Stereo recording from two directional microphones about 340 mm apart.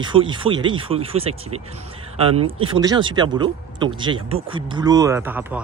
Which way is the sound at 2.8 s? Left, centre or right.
Centre.